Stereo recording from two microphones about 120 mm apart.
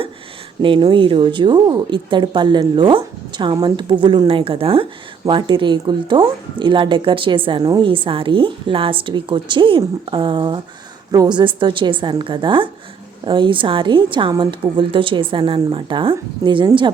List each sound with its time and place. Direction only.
0.6 s a woman's voice: 45° right (ahead or behind)
5.2 s speech: 40° right (ahead or behind)